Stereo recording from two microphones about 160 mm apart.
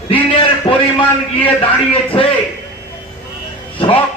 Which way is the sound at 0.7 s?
35° left (ahead or behind).